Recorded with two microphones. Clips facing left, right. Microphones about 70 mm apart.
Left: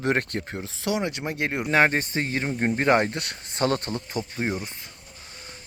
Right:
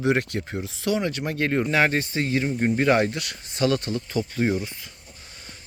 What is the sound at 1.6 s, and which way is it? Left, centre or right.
Speech, left.